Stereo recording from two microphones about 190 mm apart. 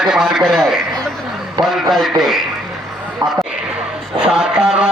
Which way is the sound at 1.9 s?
Centre (ahead or behind).